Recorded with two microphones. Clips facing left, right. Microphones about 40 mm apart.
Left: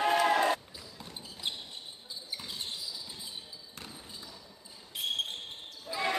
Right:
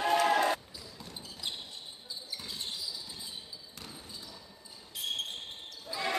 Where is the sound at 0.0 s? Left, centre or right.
Centre.